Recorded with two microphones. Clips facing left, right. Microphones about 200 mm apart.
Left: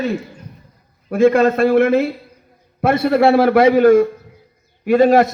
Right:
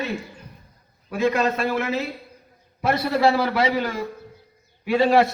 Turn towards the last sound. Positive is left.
turn(degrees=45)  # may be behind; listen again after turning